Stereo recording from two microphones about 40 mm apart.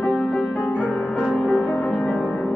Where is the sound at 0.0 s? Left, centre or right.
Centre.